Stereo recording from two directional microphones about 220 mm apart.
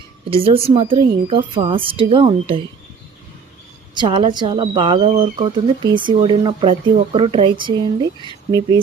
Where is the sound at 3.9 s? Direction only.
20° right (ahead or behind).